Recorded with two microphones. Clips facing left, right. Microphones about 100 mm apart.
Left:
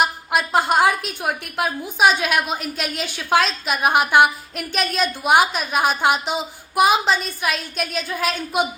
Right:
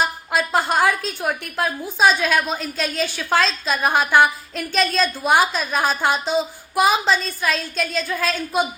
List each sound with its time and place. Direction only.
0.3 s a woman's voice: 15° left (ahead or behind)